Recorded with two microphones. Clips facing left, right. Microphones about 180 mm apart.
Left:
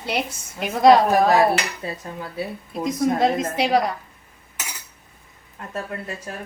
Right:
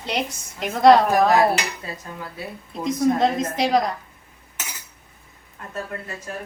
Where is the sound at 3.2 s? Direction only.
5° left (ahead or behind).